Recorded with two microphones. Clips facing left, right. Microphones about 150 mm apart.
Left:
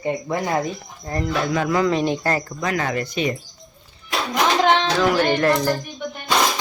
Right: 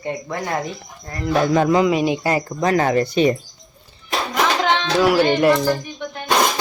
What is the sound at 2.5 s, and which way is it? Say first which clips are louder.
Speech: right 6 dB; 35° right (ahead or behind).